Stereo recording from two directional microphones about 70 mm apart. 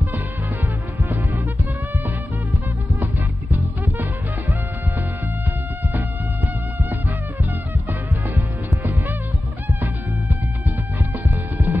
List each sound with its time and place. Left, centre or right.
1.0 s music: right
3.5 s music: right
5.9 s music: right
11.2 s music: right